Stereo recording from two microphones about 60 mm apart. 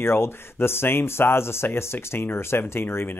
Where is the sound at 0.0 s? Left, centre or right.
Left.